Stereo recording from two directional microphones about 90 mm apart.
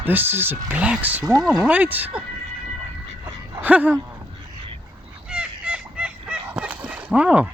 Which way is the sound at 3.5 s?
15° right (ahead or behind).